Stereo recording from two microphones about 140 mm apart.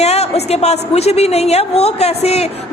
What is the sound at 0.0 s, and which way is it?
A woman's voice, 50° left (ahead or behind).